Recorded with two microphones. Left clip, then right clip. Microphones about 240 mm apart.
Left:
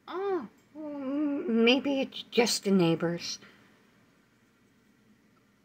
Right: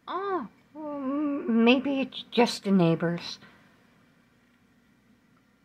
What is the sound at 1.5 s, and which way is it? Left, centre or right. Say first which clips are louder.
Speech: right 2 dB; centre.